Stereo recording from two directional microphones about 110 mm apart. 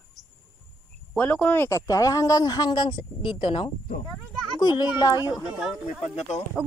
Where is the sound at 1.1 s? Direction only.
10° left (ahead or behind).